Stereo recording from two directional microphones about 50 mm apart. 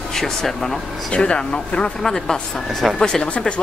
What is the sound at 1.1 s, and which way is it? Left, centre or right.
Speech, centre.